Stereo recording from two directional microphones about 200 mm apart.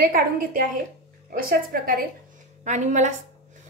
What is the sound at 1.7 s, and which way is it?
Speech, 45° right (ahead or behind).